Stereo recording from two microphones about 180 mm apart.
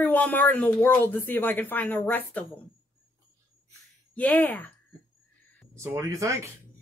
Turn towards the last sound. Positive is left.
turn(degrees=-15)  # may be behind; listen again after turning